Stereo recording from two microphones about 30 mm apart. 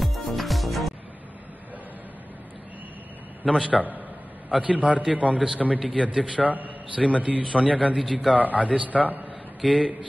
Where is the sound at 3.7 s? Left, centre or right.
Right.